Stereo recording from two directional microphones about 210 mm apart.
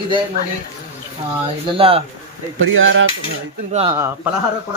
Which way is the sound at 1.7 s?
25° right (ahead or behind).